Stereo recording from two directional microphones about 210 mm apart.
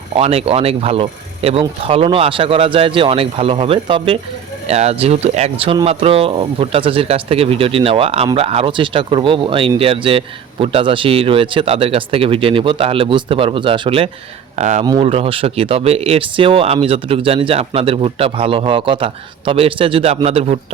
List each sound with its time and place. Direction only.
0.2 s speech: 30° right (ahead or behind)